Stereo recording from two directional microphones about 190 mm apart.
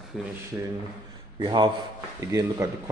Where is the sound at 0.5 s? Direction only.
10° right (ahead or behind).